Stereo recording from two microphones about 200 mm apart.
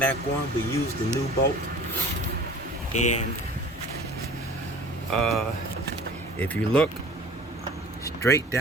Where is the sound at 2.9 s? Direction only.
35° left (ahead or behind).